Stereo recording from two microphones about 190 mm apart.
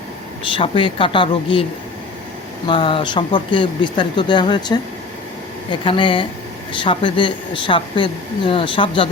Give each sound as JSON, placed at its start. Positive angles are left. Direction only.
{"t": 0.5, "sound": "speech", "side_deg": 25}
{"t": 2.6, "sound": "speech", "side_deg": 25}
{"t": 5.8, "sound": "speech", "side_deg": 25}